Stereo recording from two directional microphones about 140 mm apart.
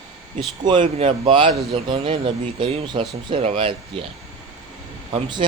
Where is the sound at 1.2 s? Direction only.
35° right (ahead or behind).